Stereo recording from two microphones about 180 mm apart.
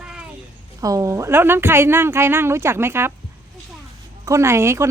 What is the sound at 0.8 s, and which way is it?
A woman's voice, 20° right (ahead or behind).